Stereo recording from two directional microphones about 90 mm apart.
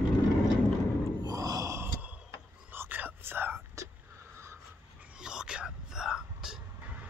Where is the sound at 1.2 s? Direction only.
45° right (ahead or behind).